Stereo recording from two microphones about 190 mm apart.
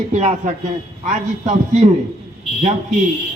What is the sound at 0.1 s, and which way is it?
A man's voice, 35° right (ahead or behind).